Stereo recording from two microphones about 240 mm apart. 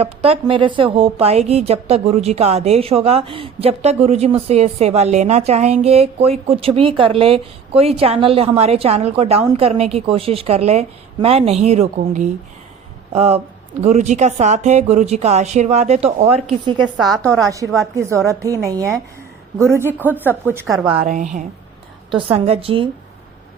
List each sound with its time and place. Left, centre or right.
0.0 s a woman's voice: right
17.1 s a woman's voice: centre
18.3 s a woman's voice: centre
20.9 s a woman's voice: right